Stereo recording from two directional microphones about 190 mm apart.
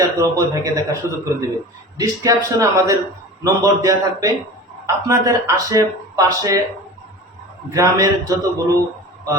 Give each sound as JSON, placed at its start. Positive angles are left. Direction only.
{"t": 0.2, "sound": "speech", "side_deg": -15}
{"t": 7.7, "sound": "speech", "side_deg": -15}